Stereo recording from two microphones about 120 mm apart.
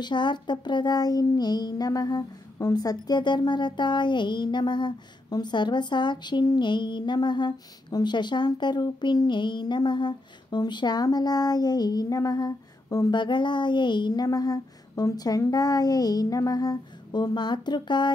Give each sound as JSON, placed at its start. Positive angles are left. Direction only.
{"t": 0.0, "sound": "a child's voice", "side_deg": 40}
{"t": 13.2, "sound": "a child's voice", "side_deg": 40}